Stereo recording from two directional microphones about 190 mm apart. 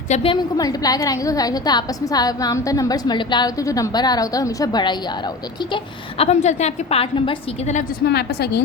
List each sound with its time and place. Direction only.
0.1 s a woman's voice: 30° left (ahead or behind)
8.0 s a woman's voice: 60° left (ahead or behind)